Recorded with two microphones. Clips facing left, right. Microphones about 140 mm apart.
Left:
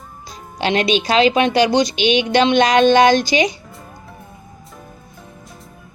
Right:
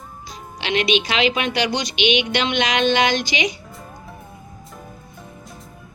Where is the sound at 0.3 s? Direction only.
40° left (ahead or behind).